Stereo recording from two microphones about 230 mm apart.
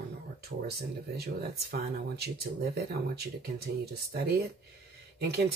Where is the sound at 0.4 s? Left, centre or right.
Right.